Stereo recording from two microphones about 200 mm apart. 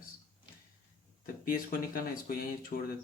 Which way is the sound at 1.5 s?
45° left (ahead or behind).